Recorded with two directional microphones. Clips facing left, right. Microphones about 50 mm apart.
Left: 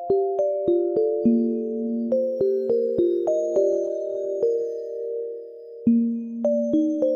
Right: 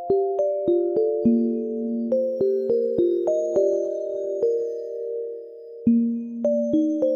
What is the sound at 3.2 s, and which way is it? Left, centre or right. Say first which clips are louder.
Music: even; right.